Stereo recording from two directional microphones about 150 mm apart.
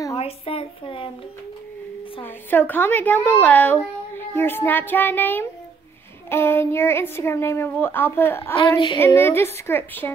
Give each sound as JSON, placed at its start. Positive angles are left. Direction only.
{"t": 0.1, "sound": "speech", "side_deg": 40}
{"t": 2.2, "sound": "speech", "side_deg": 15}
{"t": 8.5, "sound": "child singing", "side_deg": 30}
{"t": 9.0, "sound": "speech", "side_deg": 15}